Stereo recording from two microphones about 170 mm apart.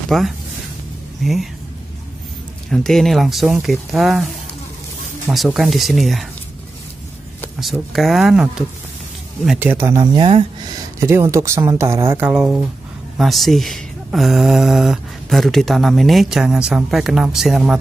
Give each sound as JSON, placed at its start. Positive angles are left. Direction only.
{"t": 0.1, "sound": "speech", "side_deg": 5}
{"t": 2.7, "sound": "speech", "side_deg": 0}
{"t": 5.3, "sound": "speech", "side_deg": 0}
{"t": 7.6, "sound": "speech", "side_deg": 0}
{"t": 10.1, "sound": "speech", "side_deg": -35}
{"t": 11.0, "sound": "speech", "side_deg": -15}